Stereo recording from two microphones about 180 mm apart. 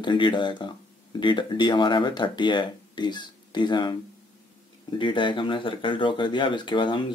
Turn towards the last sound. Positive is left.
turn(degrees=25)  # may be behind; listen again after turning